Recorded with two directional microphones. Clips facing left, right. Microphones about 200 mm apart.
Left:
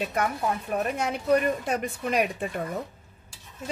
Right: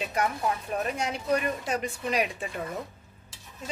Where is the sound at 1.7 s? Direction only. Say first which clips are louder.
Left 2 dB; 55° left (ahead or behind).